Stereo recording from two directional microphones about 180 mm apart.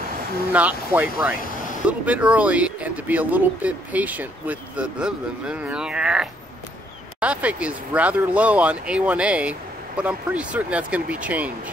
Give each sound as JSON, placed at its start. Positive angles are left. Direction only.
{"t": 0.5, "sound": "speech", "side_deg": -10}